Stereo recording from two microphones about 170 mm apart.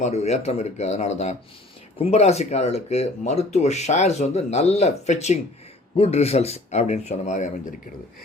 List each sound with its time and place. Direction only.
0.0 s speech: 40° left (ahead or behind)